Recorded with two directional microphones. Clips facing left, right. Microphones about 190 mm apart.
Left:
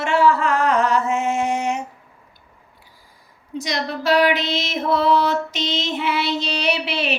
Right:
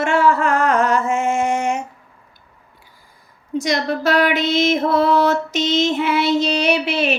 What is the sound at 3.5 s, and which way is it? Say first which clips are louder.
Music: right 5 dB; 50° right (ahead or behind).